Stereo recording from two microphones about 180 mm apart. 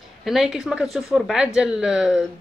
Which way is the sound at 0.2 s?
Centre (ahead or behind).